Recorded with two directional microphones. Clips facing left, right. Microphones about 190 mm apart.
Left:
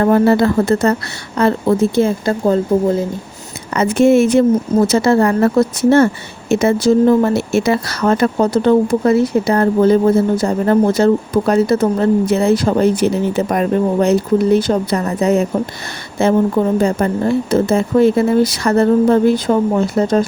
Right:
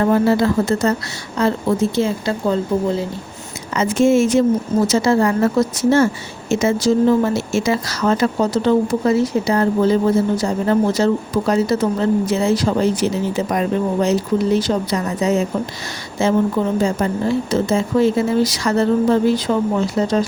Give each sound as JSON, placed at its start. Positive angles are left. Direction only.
{"t": 0.0, "sound": "speech", "side_deg": 55}
{"t": 3.7, "sound": "speech", "side_deg": 60}